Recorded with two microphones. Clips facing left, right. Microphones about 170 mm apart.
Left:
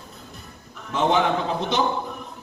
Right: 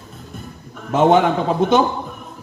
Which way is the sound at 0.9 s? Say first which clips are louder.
Right 7 dB; 45° right (ahead or behind).